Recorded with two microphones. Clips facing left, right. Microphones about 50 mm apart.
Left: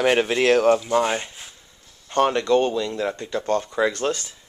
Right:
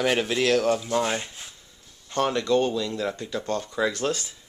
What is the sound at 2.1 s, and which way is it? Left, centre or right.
Speech, left.